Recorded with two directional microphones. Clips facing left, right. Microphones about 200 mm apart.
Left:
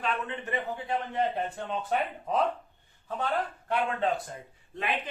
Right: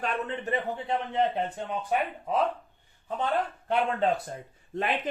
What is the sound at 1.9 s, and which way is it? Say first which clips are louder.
Speech: right 1 dB; 10° right (ahead or behind).